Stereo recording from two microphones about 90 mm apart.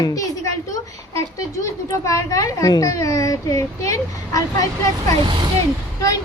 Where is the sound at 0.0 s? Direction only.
40° left (ahead or behind).